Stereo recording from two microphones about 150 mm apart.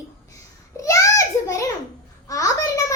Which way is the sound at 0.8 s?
20° left (ahead or behind).